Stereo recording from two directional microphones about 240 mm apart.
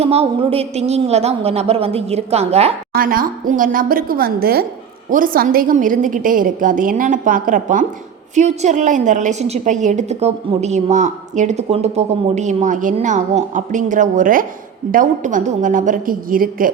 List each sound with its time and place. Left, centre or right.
0.0 s a woman's voice: right
2.9 s a woman's voice: right